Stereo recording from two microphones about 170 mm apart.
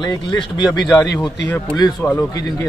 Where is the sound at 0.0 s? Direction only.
25° left (ahead or behind).